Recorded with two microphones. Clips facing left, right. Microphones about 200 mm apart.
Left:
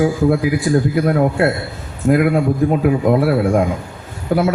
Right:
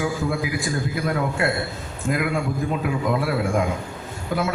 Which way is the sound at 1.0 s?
45° left (ahead or behind).